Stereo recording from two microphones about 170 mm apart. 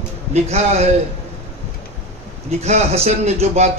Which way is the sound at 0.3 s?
40° right (ahead or behind).